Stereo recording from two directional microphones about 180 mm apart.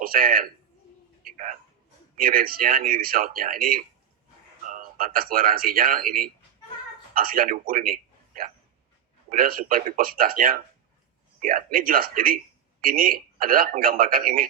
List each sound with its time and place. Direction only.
0.0 s speech: 55° right (ahead or behind)
1.2 s a sound: 50° right (ahead or behind)
2.1 s speech: 55° right (ahead or behind)